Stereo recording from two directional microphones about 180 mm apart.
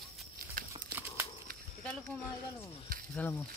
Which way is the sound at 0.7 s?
15° right (ahead or behind).